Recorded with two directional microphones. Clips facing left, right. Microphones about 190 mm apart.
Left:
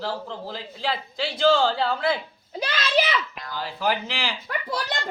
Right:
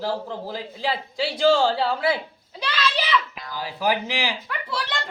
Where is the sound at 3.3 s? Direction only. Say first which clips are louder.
Even; 5° right (ahead or behind).